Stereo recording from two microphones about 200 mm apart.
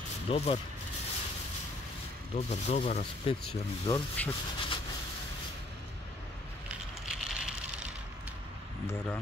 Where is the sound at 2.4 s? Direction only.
35° left (ahead or behind).